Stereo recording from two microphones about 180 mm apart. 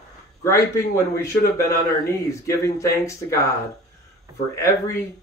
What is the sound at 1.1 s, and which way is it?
Speech, 15° left (ahead or behind).